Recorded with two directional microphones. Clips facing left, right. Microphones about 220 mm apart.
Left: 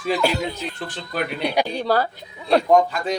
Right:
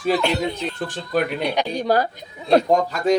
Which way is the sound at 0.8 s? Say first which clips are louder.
Right 5 dB; 45° right (ahead or behind).